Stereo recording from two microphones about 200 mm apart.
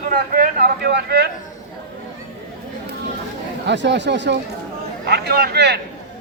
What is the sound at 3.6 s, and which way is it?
Speech, 60° right (ahead or behind).